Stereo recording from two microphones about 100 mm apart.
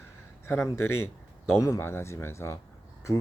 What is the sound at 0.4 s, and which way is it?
Speech, 25° left (ahead or behind).